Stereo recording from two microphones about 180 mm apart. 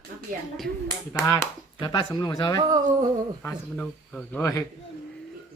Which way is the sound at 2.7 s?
20° right (ahead or behind).